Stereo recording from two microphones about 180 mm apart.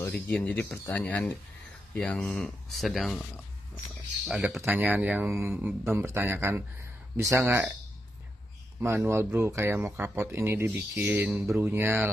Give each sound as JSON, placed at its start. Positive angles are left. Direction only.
{"t": 0.0, "sound": "speech", "side_deg": 5}
{"t": 4.3, "sound": "speech", "side_deg": 0}
{"t": 8.8, "sound": "speech", "side_deg": -15}